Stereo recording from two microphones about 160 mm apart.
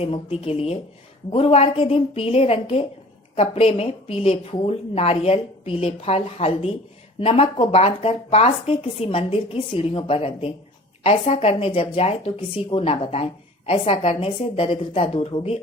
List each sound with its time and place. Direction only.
0.0 s a woman's voice: 35° left (ahead or behind)